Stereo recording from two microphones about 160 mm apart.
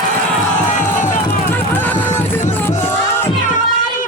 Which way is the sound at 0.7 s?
50° left (ahead or behind).